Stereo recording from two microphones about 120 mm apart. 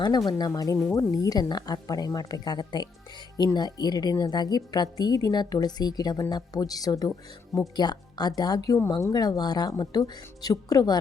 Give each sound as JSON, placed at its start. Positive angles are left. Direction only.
{"t": 0.3, "sound": "a woman's voice", "side_deg": 35}